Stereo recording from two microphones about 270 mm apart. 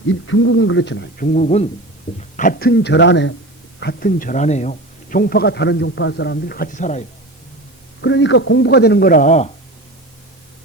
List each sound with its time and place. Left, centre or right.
0.1 s a man's voice: left
8.0 s a man's voice: left